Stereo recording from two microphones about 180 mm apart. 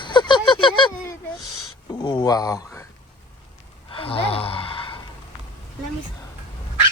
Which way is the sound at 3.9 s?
30° left (ahead or behind).